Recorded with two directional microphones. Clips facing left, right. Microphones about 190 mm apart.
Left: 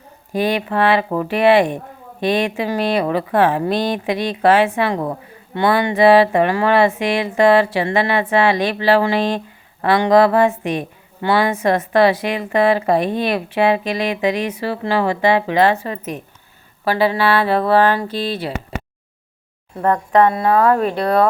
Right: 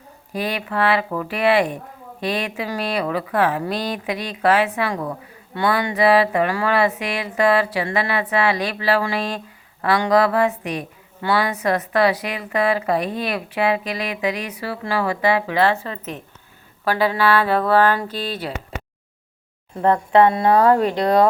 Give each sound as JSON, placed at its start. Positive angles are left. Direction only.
{"t": 0.3, "sound": "a woman's voice", "side_deg": 25}
{"t": 19.8, "sound": "speech", "side_deg": -20}